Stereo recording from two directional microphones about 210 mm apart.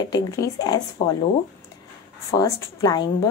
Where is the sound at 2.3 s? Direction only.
15° left (ahead or behind).